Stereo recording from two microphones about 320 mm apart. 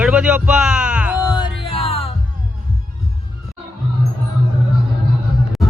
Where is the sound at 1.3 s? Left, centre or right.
Centre.